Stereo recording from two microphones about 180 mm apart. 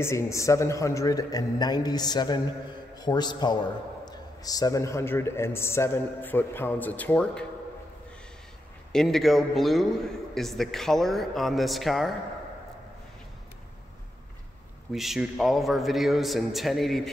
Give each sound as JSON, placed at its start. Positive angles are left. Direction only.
{"t": 0.0, "sound": "a man's voice", "side_deg": 15}
{"t": 8.9, "sound": "a man's voice", "side_deg": 0}
{"t": 14.9, "sound": "a man's voice", "side_deg": 0}